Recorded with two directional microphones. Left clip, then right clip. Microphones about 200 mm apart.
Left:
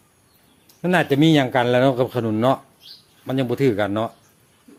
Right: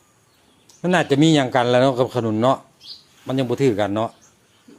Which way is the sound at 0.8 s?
Centre (ahead or behind).